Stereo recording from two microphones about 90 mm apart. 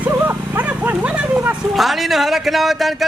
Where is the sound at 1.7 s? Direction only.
Centre (ahead or behind).